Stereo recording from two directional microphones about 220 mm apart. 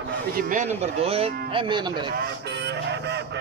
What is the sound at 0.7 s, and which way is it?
Speech, 25° right (ahead or behind).